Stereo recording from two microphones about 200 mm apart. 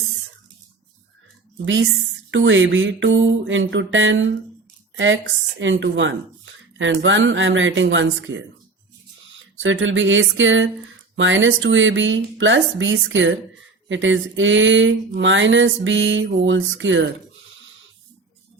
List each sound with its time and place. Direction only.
2.3 s speech: 75° right (ahead or behind)
9.6 s speech: 70° right (ahead or behind)